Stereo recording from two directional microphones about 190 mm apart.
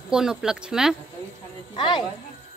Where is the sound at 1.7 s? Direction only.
25° left (ahead or behind).